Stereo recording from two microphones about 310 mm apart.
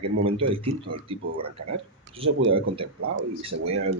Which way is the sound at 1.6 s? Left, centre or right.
Right.